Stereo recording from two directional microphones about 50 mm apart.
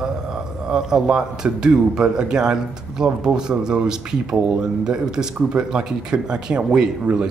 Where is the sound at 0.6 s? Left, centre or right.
Centre.